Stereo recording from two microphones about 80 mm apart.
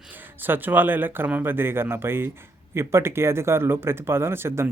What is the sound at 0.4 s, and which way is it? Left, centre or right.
Speech, right.